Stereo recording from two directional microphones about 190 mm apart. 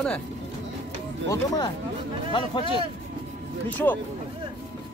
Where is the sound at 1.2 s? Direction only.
20° left (ahead or behind).